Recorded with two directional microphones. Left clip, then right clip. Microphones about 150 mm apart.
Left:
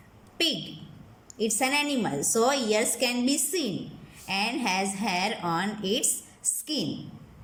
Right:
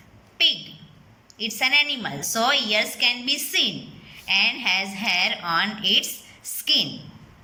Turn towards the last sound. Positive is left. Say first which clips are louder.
# right 10 dB
turn(degrees=45)  # may be behind; listen again after turning